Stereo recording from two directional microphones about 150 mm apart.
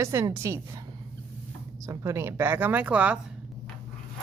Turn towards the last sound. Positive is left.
turn(degrees=-10)  # may be behind; listen again after turning